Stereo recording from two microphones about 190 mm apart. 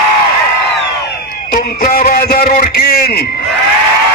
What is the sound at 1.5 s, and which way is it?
Music, 50° left (ahead or behind).